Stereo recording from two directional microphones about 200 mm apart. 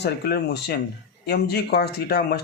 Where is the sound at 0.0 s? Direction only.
55° left (ahead or behind).